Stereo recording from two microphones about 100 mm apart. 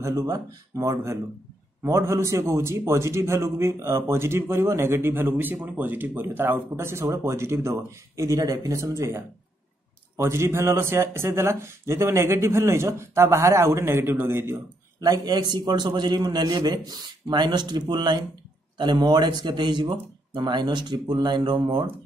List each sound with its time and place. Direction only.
0.0 s speech: 35° right (ahead or behind)
15.0 s a man's voice: 40° right (ahead or behind); by 21.9 s 55° right (ahead or behind)